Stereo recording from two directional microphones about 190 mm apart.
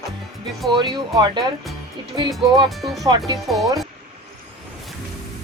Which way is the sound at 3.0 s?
20° right (ahead or behind).